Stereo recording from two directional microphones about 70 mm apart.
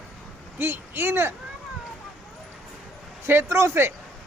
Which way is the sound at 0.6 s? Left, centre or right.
Right.